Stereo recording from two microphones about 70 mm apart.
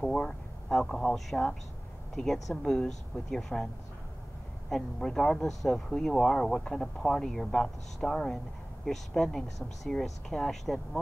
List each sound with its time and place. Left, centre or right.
0.0 s speech: centre
4.6 s speech: centre